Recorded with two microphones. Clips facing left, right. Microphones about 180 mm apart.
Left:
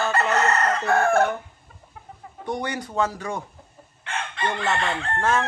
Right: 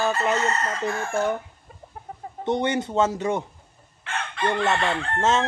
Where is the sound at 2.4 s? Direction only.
25° right (ahead or behind).